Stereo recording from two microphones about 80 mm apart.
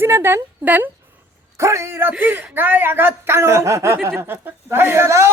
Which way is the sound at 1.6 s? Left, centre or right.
Right.